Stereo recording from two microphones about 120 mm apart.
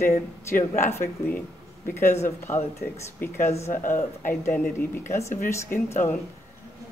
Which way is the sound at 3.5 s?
75° left (ahead or behind).